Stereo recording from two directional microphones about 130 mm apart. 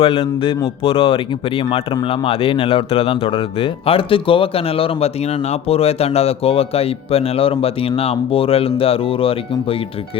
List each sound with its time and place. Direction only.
0.0 s speech: 45° left (ahead or behind)